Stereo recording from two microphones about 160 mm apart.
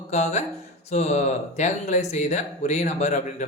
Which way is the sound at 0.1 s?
45° left (ahead or behind).